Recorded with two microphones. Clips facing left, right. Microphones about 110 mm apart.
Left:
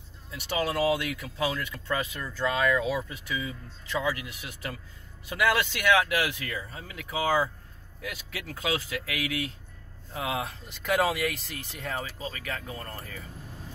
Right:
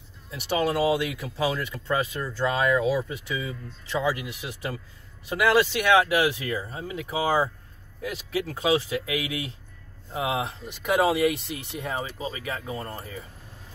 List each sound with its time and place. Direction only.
0.3 s speech: 25° right (ahead or behind)